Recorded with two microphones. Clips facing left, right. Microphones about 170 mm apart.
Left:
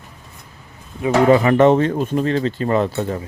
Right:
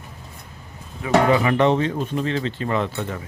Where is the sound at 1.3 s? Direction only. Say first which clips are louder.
Left 5 dB; 45° left (ahead or behind).